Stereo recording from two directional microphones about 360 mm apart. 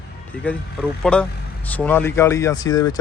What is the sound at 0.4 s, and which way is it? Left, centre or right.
Speech, centre.